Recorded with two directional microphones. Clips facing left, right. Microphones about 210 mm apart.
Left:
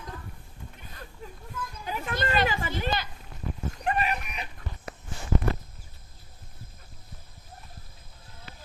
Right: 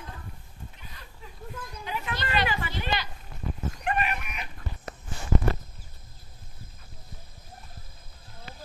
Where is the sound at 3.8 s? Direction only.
35° left (ahead or behind).